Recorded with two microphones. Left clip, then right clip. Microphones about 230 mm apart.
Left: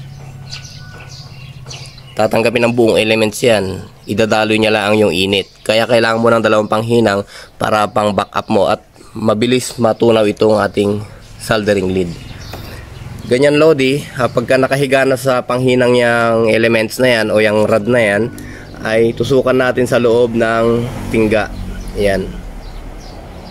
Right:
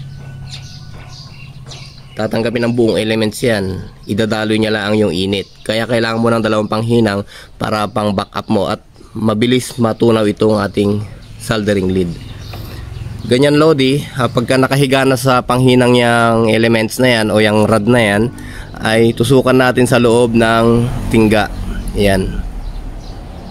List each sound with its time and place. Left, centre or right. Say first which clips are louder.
2.1 s speech: left 4 dB; centre
13.3 s speech: left 1 dB; centre